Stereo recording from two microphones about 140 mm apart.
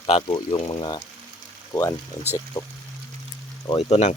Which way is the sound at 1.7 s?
25° left (ahead or behind).